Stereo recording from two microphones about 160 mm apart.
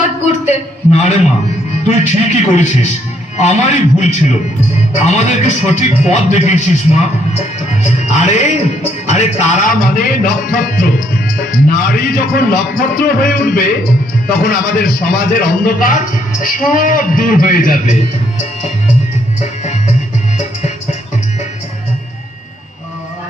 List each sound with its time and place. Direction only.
0.4 s a sound: 50° left (ahead or behind)
1.9 s music: 45° left (ahead or behind)
11.3 s speech: 60° left (ahead or behind)
19.4 s music: 45° left (ahead or behind)